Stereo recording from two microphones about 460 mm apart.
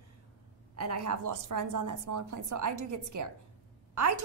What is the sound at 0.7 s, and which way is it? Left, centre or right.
A woman's voice, right.